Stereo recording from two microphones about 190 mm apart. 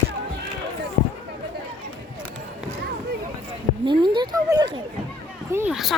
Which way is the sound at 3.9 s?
25° right (ahead or behind).